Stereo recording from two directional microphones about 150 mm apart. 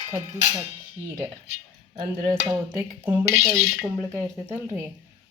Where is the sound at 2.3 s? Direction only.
20° right (ahead or behind).